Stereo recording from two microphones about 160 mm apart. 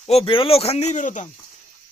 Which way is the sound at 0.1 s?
35° left (ahead or behind).